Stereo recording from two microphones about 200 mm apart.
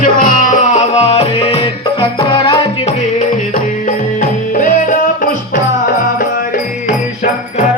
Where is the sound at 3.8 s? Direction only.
40° left (ahead or behind).